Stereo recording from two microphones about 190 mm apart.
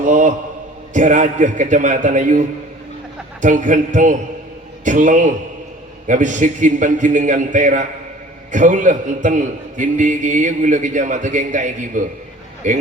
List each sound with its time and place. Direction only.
0.0 s a man's voice: 40° right (ahead or behind)